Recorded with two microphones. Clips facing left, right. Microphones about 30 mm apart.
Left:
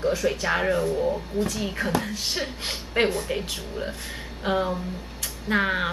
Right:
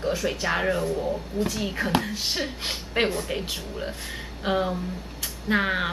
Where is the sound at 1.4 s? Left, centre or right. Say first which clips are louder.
Right 1 dB; centre.